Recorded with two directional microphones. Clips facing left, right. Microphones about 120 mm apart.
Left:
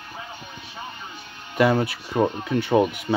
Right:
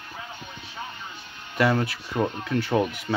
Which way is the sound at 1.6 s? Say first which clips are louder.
Left 3 dB; 20° left (ahead or behind).